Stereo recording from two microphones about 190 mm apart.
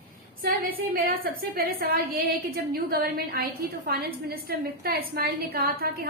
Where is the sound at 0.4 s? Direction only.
50° right (ahead or behind).